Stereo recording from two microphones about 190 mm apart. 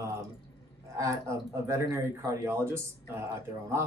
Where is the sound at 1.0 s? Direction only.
15° right (ahead or behind).